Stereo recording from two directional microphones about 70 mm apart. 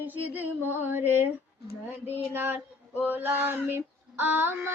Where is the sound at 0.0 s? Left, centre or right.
Right.